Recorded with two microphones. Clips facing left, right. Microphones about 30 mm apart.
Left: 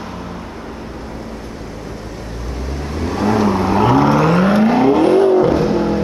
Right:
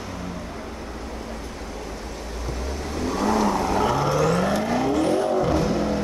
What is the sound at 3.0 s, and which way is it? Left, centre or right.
Vehicle, left.